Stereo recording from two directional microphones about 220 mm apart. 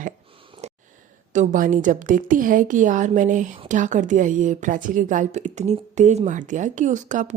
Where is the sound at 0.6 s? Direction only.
30° right (ahead or behind).